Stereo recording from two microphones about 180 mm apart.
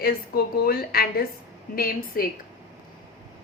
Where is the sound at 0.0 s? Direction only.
60° left (ahead or behind).